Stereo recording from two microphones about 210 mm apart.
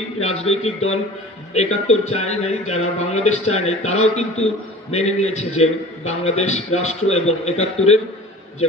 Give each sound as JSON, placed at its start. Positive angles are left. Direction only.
{"t": 0.2, "sound": "a man's voice", "side_deg": 30}